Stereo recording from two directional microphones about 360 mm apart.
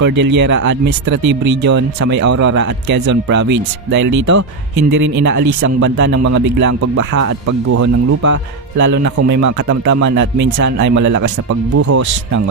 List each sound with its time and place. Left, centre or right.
0.0 s speech: right
2.2 s speech: right
2.9 s speech: right
4.3 s speech: right
8.9 s speech: right
10.1 s speech: right
11.7 s speech: right